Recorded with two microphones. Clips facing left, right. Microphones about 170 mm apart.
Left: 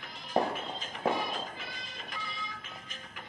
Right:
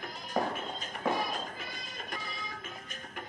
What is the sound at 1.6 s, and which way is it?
Music, 45° right (ahead or behind).